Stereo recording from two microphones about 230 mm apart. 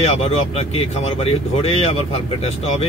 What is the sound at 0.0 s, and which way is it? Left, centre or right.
Speech, left.